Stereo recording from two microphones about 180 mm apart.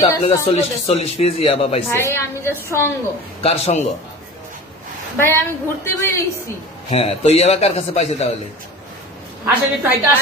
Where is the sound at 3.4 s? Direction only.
35° left (ahead or behind).